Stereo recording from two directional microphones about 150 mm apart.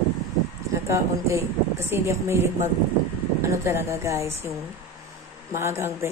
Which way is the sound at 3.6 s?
15° right (ahead or behind).